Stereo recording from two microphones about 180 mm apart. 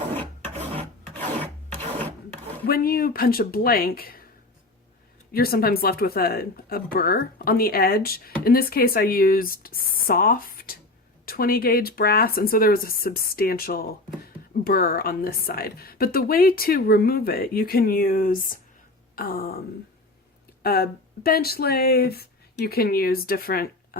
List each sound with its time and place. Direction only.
2.6 s speech: 55° left (ahead or behind)
5.3 s speech: 55° left (ahead or behind)
19.1 s a sound: 55° left (ahead or behind)
20.6 s speech: 60° left (ahead or behind)